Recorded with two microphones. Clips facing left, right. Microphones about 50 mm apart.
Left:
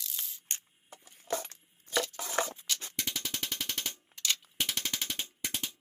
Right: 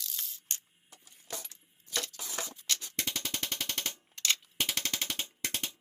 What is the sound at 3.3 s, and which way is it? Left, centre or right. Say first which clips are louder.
Machine gun: even; right.